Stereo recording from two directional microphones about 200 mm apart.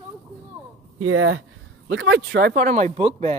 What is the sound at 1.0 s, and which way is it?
Speech, 90° right.